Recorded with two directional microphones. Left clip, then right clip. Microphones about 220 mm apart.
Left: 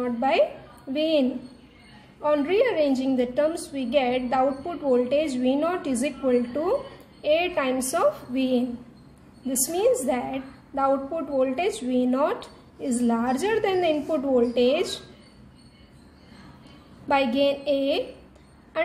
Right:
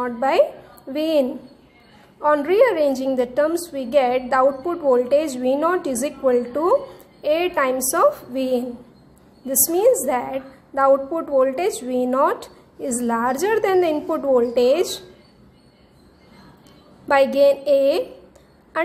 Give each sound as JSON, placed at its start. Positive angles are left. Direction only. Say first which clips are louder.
{"t": 0.0, "sound": "a woman's voice", "louder": "right 4 dB", "side_deg": -15}
{"t": 9.7, "sound": "a woman's voice", "louder": "right 5 dB", "side_deg": -15}
{"t": 17.1, "sound": "a woman's voice", "louder": "right 7 dB", "side_deg": -15}